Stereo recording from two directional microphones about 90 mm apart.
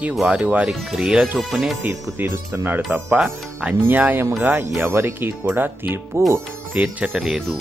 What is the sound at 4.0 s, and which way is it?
Speech, 25° right (ahead or behind).